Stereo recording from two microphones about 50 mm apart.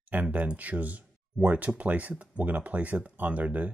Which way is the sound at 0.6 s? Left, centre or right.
Right.